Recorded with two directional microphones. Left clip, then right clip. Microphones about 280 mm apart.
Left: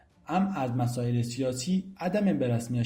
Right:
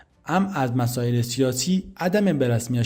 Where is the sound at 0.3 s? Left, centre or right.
Right.